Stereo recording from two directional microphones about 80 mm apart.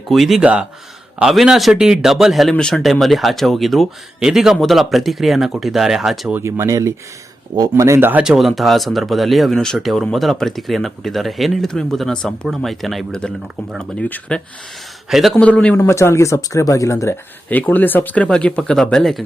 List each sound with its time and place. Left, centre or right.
0.1 s speech: centre
2.6 s speech: centre
2.8 s speech: centre
6.4 s speech: right
8.2 s speech: centre
15.1 s speech: centre
15.4 s speech: centre
15.8 s speech: left
17.5 s speech: left; by 19.2 s centre